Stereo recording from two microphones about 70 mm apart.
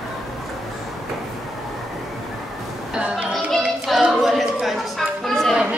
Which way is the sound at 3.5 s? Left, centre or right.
Centre.